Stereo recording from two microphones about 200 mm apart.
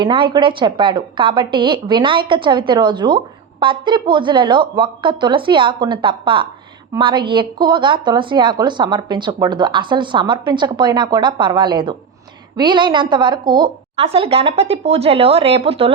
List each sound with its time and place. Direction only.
0.0 s a woman's voice: 25° right (ahead or behind)